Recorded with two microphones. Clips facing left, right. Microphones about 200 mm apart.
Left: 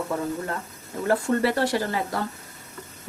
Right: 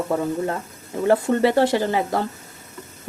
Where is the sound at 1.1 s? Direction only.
20° right (ahead or behind).